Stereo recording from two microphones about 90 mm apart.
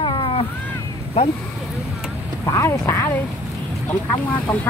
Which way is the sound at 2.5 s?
30° left (ahead or behind).